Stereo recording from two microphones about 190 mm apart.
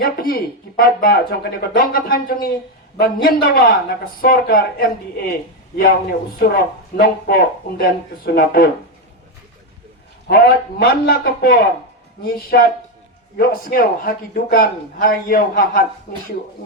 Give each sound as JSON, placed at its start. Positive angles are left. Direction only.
{"t": 0.0, "sound": "speech", "side_deg": 50}
{"t": 10.2, "sound": "speech", "side_deg": 50}